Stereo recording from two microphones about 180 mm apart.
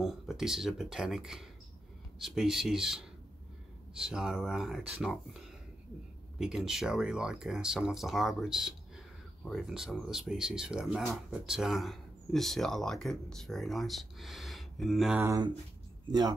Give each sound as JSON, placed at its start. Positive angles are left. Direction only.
{"t": 0.0, "sound": "speech", "side_deg": 0}
{"t": 6.3, "sound": "speech", "side_deg": -5}
{"t": 15.2, "sound": "speech", "side_deg": -20}